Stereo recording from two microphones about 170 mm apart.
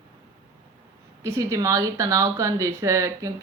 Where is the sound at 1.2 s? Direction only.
15° right (ahead or behind).